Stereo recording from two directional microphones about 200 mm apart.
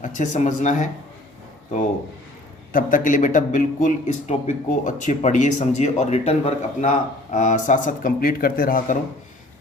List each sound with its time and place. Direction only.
0.0 s a man's voice: 40° left (ahead or behind)
2.7 s a man's voice: 40° left (ahead or behind)